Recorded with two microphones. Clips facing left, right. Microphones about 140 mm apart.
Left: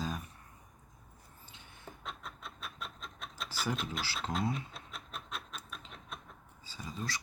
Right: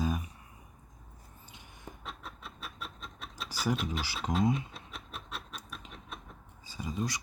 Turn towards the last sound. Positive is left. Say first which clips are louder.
# right 6 dB
turn(degrees=-15)  # may be behind; listen again after turning